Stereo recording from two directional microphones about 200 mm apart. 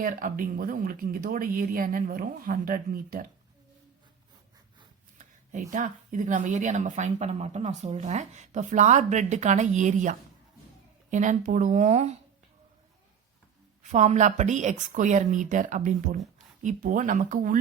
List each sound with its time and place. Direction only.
0.0 s speech: 45° right (ahead or behind)
5.1 s speech: 40° right (ahead or behind)
13.9 s speech: 35° right (ahead or behind)